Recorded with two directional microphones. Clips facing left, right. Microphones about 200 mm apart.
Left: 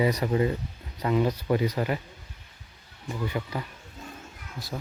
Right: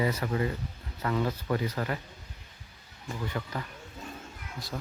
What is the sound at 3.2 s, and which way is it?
Speech, 10° left (ahead or behind).